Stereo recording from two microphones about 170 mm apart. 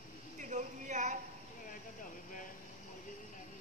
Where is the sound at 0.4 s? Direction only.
45° right (ahead or behind).